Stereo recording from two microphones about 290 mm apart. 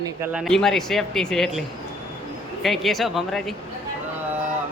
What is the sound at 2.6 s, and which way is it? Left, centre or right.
Speech, centre.